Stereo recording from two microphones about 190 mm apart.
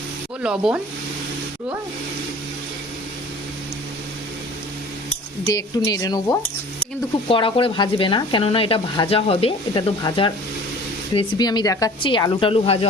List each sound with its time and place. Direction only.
0.4 s speech: 5° right (ahead or behind)
5.5 s speech: 20° left (ahead or behind)